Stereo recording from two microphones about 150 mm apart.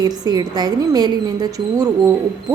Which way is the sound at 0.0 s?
25° right (ahead or behind).